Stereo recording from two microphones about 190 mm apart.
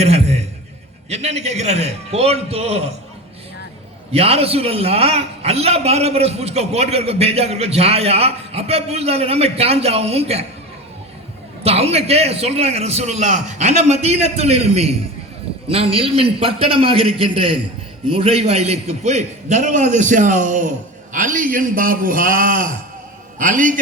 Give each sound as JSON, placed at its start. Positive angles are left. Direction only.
{"t": 0.0, "sound": "a sound", "side_deg": -35}
{"t": 1.1, "sound": "a man's voice", "side_deg": -35}
{"t": 4.1, "sound": "a man's voice", "side_deg": -30}
{"t": 11.6, "sound": "a man's voice", "side_deg": -35}